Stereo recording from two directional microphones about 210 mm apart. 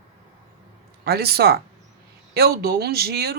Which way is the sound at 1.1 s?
50° right (ahead or behind).